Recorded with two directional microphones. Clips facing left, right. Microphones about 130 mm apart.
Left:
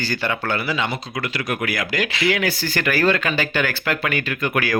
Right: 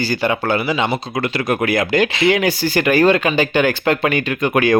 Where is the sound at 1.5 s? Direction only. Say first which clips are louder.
Right 9 dB; 30° right (ahead or behind).